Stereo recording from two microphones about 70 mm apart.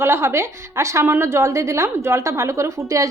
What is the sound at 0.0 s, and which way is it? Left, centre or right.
A woman's voice, right.